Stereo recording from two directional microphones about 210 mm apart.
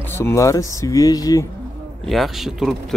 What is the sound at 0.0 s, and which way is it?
Speech, 10° left (ahead or behind).